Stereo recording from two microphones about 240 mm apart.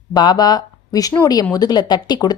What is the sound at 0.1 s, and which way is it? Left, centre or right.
Speech, centre.